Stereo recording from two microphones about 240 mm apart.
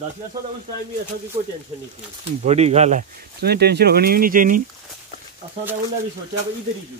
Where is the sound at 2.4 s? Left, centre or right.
Right.